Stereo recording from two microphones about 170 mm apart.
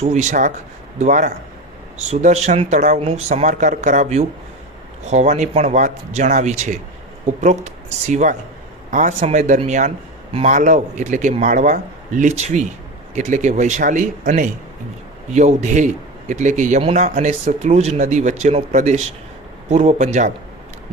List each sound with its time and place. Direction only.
0.0 s a man's voice: 45° right (ahead or behind)